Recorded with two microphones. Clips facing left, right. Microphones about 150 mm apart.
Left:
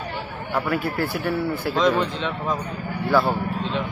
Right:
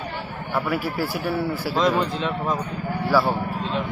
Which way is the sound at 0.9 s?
10° right (ahead or behind).